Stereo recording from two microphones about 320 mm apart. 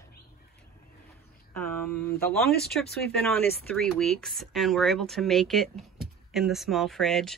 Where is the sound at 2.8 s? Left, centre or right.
Left.